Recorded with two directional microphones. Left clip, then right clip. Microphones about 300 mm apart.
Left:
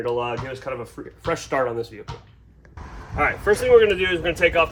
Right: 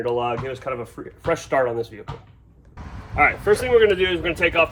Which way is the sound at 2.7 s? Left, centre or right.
Left.